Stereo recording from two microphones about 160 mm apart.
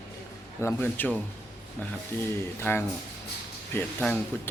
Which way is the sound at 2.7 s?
15° left (ahead or behind).